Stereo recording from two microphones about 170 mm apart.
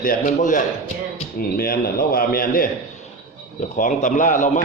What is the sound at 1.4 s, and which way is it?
A man's voice, 65° left (ahead or behind).